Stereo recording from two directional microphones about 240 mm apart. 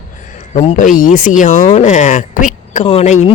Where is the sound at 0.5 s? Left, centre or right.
Left.